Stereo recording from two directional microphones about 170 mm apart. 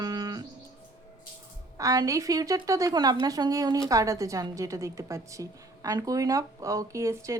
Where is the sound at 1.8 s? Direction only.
20° right (ahead or behind).